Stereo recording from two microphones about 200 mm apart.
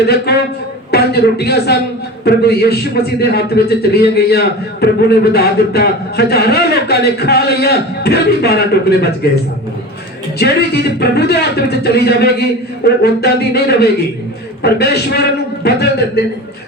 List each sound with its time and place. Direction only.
0.0 s a man's voice: 55° left (ahead or behind)
10.3 s a man's voice: 55° left (ahead or behind)